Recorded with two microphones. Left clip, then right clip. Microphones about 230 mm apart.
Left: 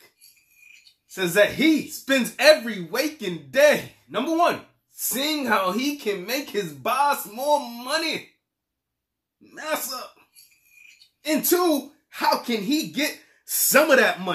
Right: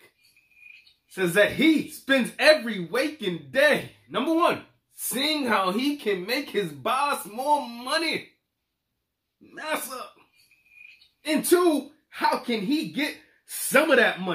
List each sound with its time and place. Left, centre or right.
1.1 s speech: centre
9.5 s speech: centre
11.2 s speech: centre